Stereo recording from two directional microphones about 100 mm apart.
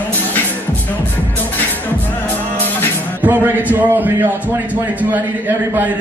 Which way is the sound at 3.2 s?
20° right (ahead or behind).